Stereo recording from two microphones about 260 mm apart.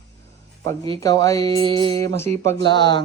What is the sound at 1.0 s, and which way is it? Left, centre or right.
Speech, centre.